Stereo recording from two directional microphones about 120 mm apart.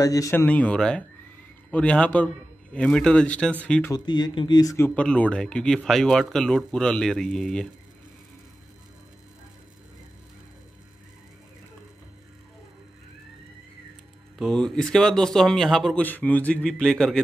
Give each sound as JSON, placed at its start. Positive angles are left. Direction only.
{"t": 0.0, "sound": "speech", "side_deg": 30}
{"t": 0.5, "sound": "a man's voice", "side_deg": 10}
{"t": 3.9, "sound": "speech", "side_deg": 35}
{"t": 4.7, "sound": "a man's voice", "side_deg": 15}
{"t": 14.4, "sound": "speech", "side_deg": 5}
{"t": 16.0, "sound": "a man's voice", "side_deg": 15}